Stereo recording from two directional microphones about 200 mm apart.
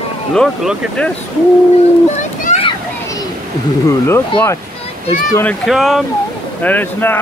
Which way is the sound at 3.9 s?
15° left (ahead or behind).